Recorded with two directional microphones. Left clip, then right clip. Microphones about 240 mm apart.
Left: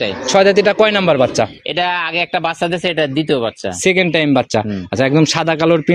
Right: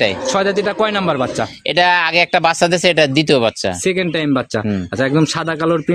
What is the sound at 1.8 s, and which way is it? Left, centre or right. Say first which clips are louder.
Speech: right 4 dB; right.